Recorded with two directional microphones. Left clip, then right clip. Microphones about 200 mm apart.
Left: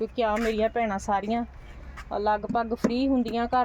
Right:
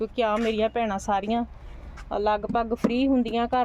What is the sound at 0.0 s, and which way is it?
Speech, centre (ahead or behind).